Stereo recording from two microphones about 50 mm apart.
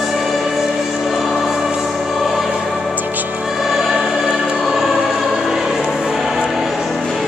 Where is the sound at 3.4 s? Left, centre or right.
Centre.